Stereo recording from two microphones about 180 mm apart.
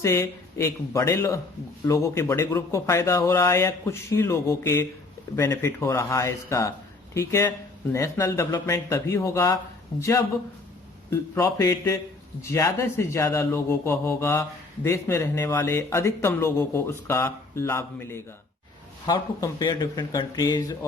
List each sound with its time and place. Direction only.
0.0 s speech: 15° left (ahead or behind)